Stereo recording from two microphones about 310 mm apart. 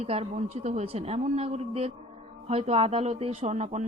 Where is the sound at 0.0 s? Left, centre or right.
Centre.